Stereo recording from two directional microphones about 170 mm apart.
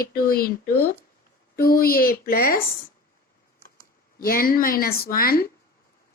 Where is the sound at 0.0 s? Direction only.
60° left (ahead or behind).